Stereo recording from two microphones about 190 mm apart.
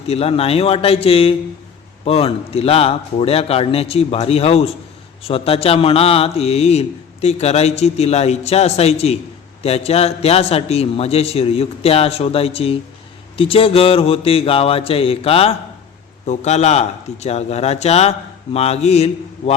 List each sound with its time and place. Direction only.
0.1 s a man's voice: 30° left (ahead or behind)
13.3 s mantra: 30° left (ahead or behind)
16.2 s a man's voice: 35° left (ahead or behind)